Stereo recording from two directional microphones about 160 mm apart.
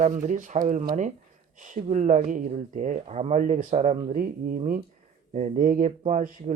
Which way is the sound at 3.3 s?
55° right (ahead or behind).